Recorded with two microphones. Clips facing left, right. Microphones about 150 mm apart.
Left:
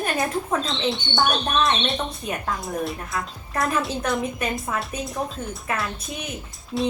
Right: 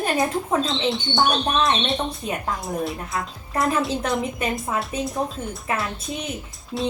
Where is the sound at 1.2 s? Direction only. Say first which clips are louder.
Even; centre (ahead or behind).